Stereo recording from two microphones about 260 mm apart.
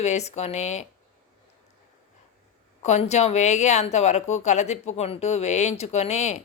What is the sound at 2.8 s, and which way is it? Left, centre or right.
Speech, left.